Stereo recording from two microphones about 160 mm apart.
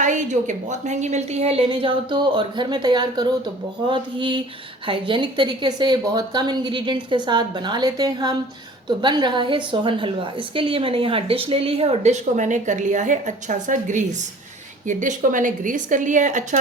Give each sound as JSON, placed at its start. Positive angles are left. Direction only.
{"t": 0.0, "sound": "a woman's voice", "side_deg": -50}